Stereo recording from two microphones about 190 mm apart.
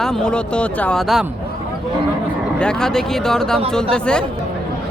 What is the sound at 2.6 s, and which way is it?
Speech, 5° left (ahead or behind).